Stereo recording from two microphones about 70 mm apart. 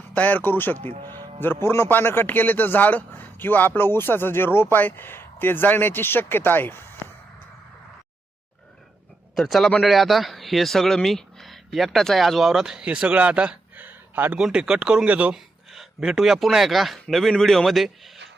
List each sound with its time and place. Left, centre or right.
0.1 s a man's voice: left
9.3 s speech: centre
13.8 s a sound: right
14.3 s speech: centre
15.3 s speech: centre